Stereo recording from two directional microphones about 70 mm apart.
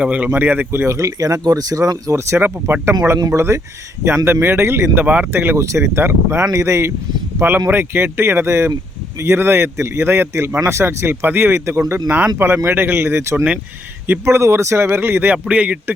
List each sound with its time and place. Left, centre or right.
0.0 s speech: centre
3.3 s speech: right
5.0 s speech: right
5.3 s speech: right
7.3 s speech: right
12.0 s speech: right
15.4 s speech: centre